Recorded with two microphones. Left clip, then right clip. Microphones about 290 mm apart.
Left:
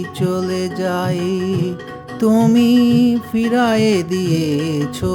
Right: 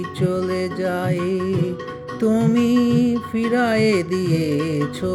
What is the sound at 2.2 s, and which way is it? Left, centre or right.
Music, centre.